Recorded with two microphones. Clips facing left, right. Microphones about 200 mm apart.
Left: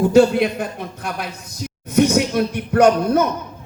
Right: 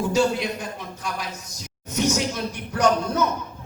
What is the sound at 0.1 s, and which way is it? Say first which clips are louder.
Speech: left 8 dB; 55° left (ahead or behind).